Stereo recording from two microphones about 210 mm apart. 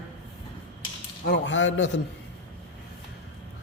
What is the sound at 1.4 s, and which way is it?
Speech, 60° left (ahead or behind).